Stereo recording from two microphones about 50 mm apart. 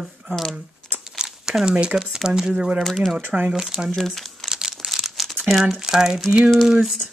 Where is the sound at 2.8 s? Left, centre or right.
Centre.